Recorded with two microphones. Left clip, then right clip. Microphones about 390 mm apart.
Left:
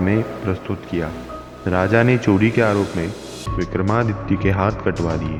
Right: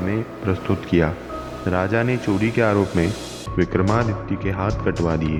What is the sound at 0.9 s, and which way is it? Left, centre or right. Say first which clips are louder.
Speech: right 5 dB; right.